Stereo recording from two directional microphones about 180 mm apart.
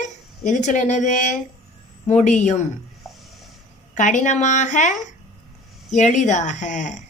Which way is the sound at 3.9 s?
45° left (ahead or behind).